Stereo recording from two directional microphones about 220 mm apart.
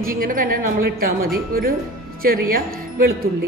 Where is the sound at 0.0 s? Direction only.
40° right (ahead or behind).